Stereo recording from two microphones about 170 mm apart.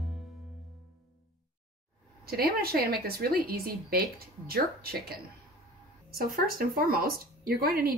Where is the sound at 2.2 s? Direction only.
65° right (ahead or behind).